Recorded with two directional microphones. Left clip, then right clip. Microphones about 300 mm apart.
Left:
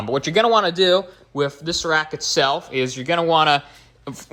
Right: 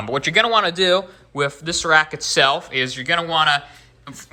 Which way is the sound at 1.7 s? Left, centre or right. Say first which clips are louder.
Right 6 dB; left.